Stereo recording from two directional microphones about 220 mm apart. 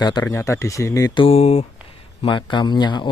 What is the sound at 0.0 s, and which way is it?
Speech, 15° left (ahead or behind).